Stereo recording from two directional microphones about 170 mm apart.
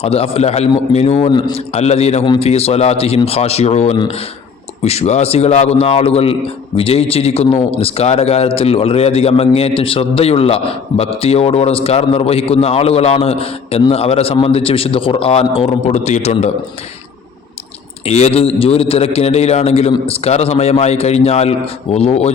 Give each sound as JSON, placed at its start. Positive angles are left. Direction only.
{"t": 0.0, "sound": "a man's voice", "side_deg": 35}
{"t": 18.0, "sound": "a man's voice", "side_deg": 40}